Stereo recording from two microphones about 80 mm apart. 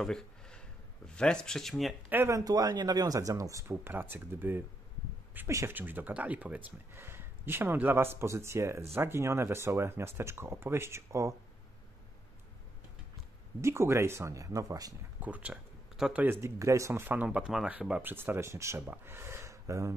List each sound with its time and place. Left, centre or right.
0.0 s speech: centre
2.2 s speech: right
3.8 s speech: right
5.7 s speech: right
6.9 s speech: right
13.6 s speech: right
15.1 s speech: centre
16.3 s speech: right
17.1 s speech: centre
18.0 s speech: right